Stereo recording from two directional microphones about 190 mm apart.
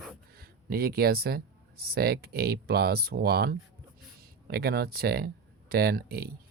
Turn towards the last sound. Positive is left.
turn(degrees=-55)  # may be behind; listen again after turning